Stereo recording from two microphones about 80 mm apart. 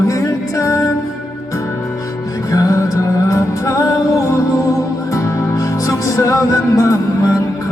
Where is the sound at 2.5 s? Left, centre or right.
Left.